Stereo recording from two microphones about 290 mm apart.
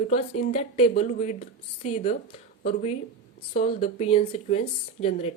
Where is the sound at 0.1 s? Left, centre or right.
Left.